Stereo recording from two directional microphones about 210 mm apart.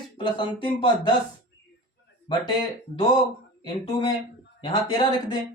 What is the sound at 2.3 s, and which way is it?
Speech, 25° left (ahead or behind).